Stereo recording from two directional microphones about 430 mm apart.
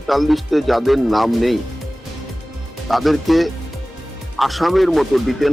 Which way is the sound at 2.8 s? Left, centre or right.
Centre.